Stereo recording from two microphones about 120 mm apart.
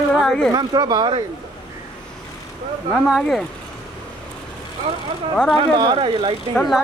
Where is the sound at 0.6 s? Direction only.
35° right (ahead or behind).